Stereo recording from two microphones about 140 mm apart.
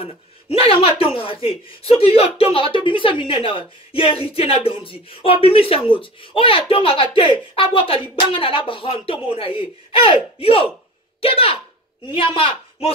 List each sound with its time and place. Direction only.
0.0 s speech: 45° left (ahead or behind)